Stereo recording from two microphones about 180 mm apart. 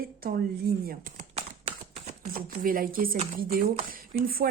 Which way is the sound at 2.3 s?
50° right (ahead or behind).